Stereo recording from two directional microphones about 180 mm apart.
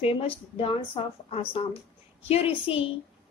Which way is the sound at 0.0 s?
30° left (ahead or behind).